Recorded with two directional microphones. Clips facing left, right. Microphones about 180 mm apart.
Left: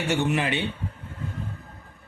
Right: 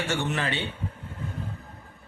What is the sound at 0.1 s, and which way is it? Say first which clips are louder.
Speech: left 8 dB; 15° left (ahead or behind).